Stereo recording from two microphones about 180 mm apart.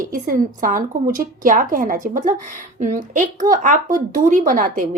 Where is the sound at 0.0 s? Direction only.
50° right (ahead or behind).